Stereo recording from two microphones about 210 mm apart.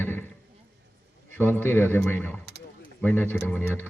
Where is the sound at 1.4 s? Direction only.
10° left (ahead or behind).